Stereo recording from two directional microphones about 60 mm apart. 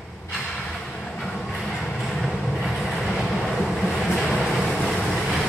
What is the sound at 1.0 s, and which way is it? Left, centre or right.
Train, centre.